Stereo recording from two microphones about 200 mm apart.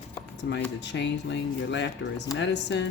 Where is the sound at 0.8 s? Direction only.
60° left (ahead or behind).